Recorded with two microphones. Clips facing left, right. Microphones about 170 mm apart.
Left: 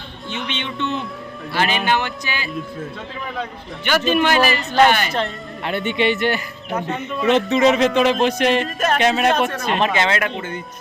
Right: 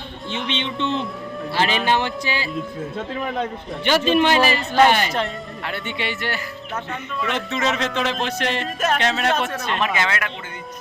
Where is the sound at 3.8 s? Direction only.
30° right (ahead or behind).